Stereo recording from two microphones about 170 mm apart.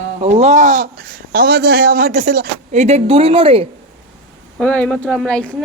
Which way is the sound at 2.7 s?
40° right (ahead or behind).